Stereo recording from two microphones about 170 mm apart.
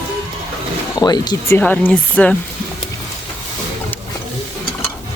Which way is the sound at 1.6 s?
10° left (ahead or behind).